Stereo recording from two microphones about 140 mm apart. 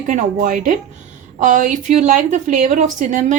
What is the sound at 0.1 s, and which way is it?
A woman's voice, 60° right (ahead or behind).